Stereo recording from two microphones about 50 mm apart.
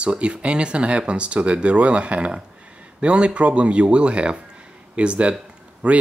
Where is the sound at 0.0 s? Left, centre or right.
Right.